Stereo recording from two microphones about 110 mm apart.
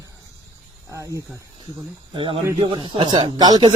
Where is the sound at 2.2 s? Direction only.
55° right (ahead or behind).